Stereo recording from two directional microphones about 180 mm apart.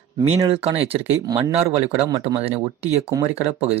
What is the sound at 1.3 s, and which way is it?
Speech, 20° right (ahead or behind).